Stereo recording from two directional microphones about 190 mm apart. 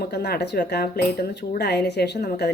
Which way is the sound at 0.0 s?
60° left (ahead or behind).